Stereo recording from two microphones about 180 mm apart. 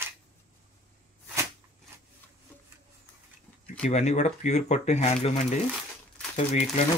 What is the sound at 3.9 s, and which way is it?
Speech, 40° left (ahead or behind).